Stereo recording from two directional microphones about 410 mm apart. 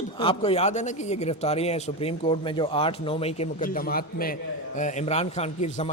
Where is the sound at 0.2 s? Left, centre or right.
Centre.